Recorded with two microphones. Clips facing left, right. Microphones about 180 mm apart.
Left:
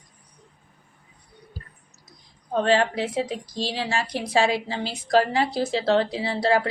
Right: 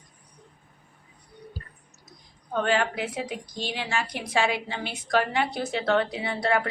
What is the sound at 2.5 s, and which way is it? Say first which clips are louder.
A woman's voice: left 4 dB; 30° left (ahead or behind).